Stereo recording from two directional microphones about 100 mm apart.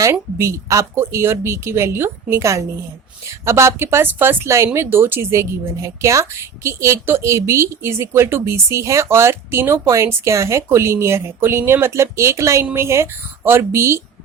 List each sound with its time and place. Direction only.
0.0 s speech: 30° right (ahead or behind)